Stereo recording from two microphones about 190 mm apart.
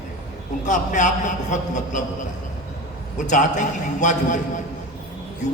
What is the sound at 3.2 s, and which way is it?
A man's voice, 40° left (ahead or behind).